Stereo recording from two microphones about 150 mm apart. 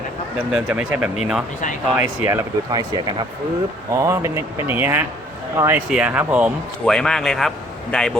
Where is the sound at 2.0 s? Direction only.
15° right (ahead or behind).